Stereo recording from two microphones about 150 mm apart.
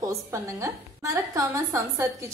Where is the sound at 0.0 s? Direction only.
20° right (ahead or behind).